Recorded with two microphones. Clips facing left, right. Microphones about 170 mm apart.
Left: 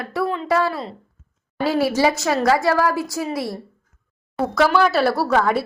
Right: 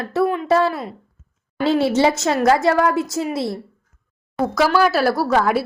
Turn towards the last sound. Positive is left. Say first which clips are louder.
# right 1 dB
turn(degrees=-5)  # may be behind; listen again after turning